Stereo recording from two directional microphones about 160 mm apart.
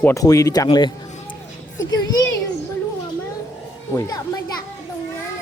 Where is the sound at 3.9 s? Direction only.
25° left (ahead or behind).